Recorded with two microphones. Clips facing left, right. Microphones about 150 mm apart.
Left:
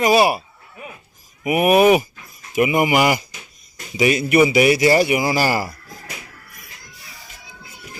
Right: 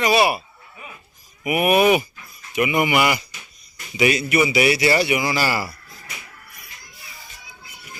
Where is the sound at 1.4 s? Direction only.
35° left (ahead or behind).